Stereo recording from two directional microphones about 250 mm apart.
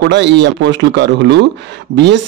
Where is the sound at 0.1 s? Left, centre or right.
Right.